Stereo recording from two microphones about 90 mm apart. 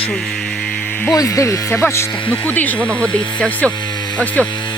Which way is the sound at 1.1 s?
40° left (ahead or behind).